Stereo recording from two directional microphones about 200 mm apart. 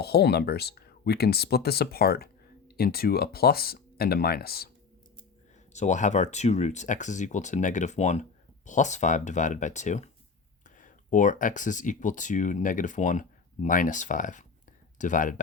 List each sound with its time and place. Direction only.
0.0 s speech: 55° left (ahead or behind)
5.7 s speech: 35° left (ahead or behind)